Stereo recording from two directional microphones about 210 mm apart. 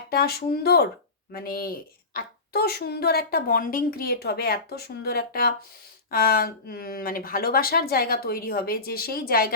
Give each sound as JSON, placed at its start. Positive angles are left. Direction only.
{"t": 0.1, "sound": "a child's voice", "side_deg": 50}